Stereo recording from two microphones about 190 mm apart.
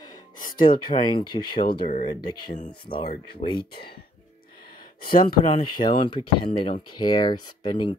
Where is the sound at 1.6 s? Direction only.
50° left (ahead or behind).